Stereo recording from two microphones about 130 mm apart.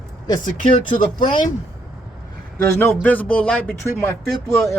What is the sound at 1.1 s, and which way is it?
Speech, 90° left.